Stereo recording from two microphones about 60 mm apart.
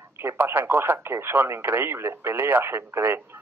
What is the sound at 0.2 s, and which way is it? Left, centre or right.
Speech, right.